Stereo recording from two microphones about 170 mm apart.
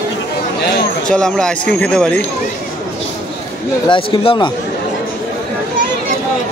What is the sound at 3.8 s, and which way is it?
Speech, 30° left (ahead or behind).